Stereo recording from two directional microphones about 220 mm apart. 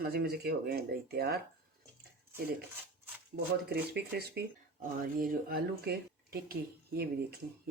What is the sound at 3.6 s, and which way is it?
Speech, 45° right (ahead or behind).